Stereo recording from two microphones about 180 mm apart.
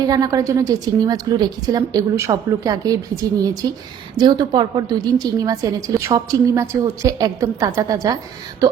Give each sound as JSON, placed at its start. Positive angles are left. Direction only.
{"t": 0.0, "sound": "a woman's voice", "side_deg": -20}